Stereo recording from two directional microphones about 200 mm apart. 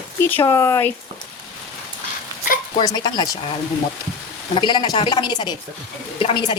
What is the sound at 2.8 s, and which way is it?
Speech, 20° left (ahead or behind).